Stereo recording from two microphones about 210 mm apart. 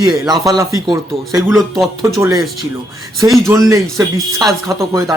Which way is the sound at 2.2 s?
15° right (ahead or behind).